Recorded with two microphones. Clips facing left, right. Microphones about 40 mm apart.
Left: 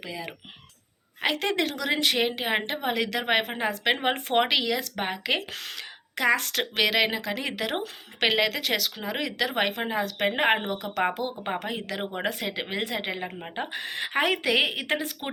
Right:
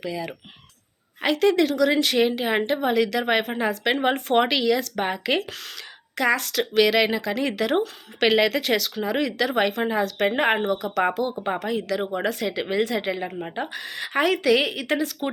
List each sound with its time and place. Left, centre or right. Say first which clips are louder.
1.4 s speech: right 11 dB; left
1.7 s speech: right 6 dB; centre
5.5 s speech: even; left
6.8 s speech: right 4 dB; centre
13.7 s speech: right 1 dB; left